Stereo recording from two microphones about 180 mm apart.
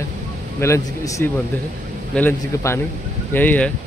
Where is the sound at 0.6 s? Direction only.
15° left (ahead or behind).